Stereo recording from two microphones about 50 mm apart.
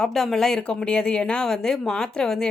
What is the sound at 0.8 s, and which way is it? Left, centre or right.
A woman's voice, centre.